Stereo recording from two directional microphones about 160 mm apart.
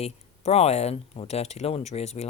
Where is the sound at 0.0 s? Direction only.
40° left (ahead or behind).